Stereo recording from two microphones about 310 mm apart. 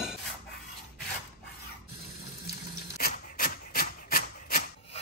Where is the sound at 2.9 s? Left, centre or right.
Left.